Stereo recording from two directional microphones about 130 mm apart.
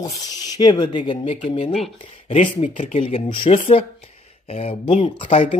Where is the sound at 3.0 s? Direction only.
45° left (ahead or behind).